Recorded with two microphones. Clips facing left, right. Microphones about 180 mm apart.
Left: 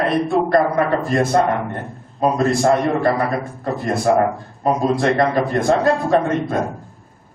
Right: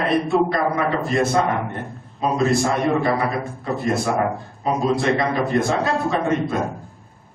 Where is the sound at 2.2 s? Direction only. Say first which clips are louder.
Left 3 dB; 55° left (ahead or behind).